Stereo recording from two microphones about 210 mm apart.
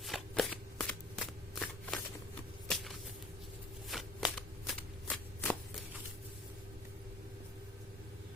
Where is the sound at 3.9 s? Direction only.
Centre (ahead or behind).